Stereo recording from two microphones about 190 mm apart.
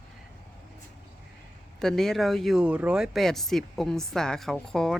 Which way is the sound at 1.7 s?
Centre (ahead or behind).